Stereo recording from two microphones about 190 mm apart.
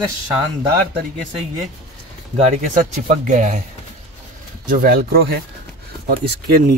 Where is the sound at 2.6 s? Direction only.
40° right (ahead or behind).